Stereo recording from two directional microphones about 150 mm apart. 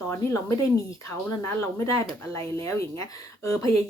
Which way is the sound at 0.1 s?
20° left (ahead or behind).